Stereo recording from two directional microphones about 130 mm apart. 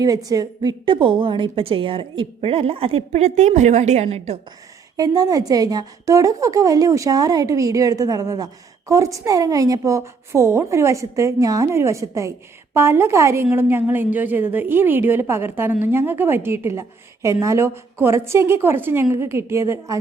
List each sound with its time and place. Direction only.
0.3 s a woman's voice: 30° right (ahead or behind); by 4.4 s 55° right (ahead or behind)
4.9 s a woman's voice: 30° right (ahead or behind)